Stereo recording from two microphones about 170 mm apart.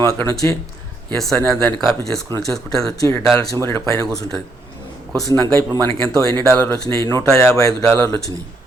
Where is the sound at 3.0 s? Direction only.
15° left (ahead or behind).